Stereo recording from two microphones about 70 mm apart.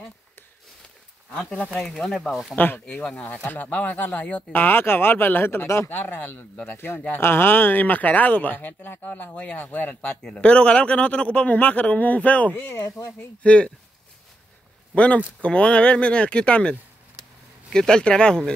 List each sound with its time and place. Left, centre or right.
1.3 s speech: centre
1.8 s speech: centre
2.5 s speech: left
2.8 s speech: centre
12.5 s speech: left
12.8 s speech: left
13.4 s speech: centre
15.0 s speech: centre